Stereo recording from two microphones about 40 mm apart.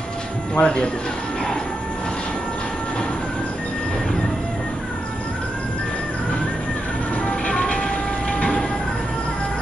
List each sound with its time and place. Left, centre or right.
0.6 s speech: centre
7.2 s train: left